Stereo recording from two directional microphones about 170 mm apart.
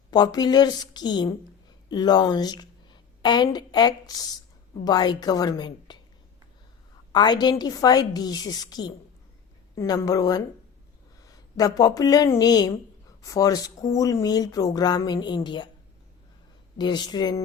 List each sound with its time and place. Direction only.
0.1 s a woman's voice: 25° left (ahead or behind)
7.1 s a woman's voice: 25° left (ahead or behind)
16.7 s speech: 25° left (ahead or behind)